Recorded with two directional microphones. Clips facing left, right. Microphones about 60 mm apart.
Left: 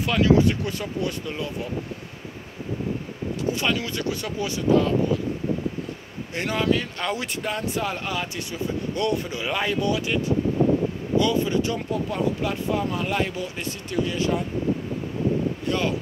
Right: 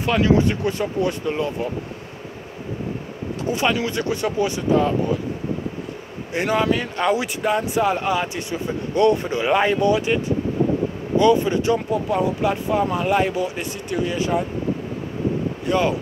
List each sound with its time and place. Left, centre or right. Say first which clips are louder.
0.0 s speech: right 1 dB; right
3.5 s speech: right 4 dB; right
6.3 s speech: right 4 dB; centre
15.7 s speech: right 7 dB; centre